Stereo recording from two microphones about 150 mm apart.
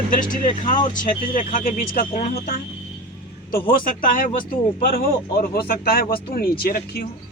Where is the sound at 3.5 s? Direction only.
65° left (ahead or behind); by 7.1 s 90° left.